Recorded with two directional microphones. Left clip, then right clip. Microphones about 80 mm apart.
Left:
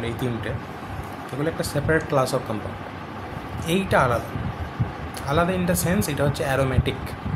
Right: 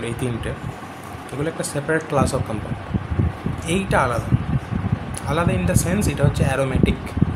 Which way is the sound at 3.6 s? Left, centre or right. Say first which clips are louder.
Even; centre.